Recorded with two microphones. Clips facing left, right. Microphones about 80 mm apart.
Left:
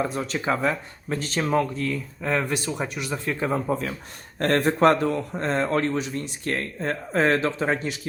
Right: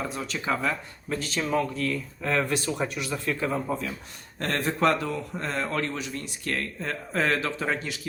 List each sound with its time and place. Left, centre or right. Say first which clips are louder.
0.0 s a man's voice: left 5 dB; left
1.9 s speech: left 2 dB; centre
4.4 s a man's voice: left 6 dB; left